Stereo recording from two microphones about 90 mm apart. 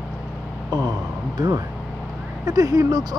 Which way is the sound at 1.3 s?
45° right (ahead or behind).